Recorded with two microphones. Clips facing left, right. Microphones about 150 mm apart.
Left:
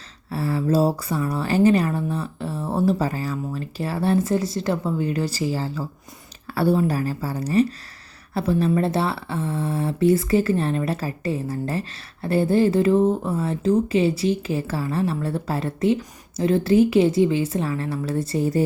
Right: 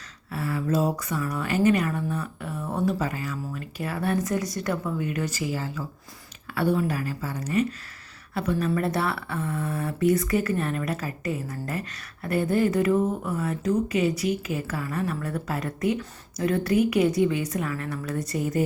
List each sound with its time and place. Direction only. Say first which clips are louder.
0.3 s speech: left 5 dB; 35° left (ahead or behind)